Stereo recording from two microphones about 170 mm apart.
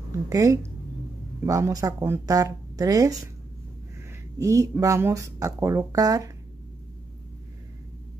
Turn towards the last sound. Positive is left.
turn(degrees=-20)  # may be behind; listen again after turning